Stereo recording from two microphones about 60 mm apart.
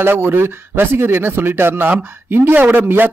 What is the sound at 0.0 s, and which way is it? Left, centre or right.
Speech, right.